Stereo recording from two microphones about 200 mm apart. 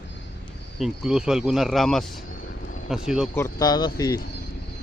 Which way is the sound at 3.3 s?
15° left (ahead or behind).